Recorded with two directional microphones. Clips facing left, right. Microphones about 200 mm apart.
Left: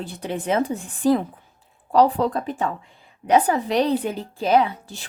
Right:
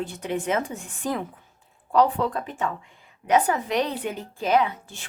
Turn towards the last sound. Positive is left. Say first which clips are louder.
# left 3 dB
turn(degrees=35)  # may be behind; listen again after turning